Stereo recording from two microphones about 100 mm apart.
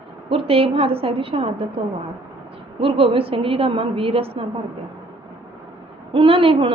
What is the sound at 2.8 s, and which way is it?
A woman's voice, 70° right (ahead or behind).